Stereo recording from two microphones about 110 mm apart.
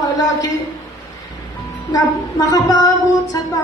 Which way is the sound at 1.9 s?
35° left (ahead or behind).